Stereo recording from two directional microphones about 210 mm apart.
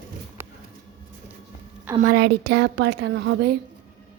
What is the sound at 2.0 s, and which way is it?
A woman's voice, 45° right (ahead or behind).